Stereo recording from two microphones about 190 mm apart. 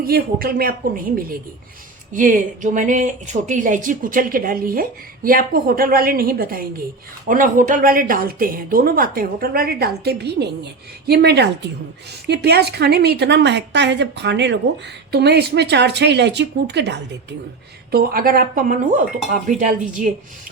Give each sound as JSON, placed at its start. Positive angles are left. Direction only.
{"t": 0.0, "sound": "speech", "side_deg": -50}
{"t": 2.1, "sound": "a woman's voice", "side_deg": -45}
{"t": 17.9, "sound": "speech", "side_deg": -50}